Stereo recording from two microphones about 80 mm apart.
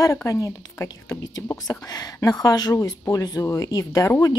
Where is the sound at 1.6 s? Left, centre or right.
Left.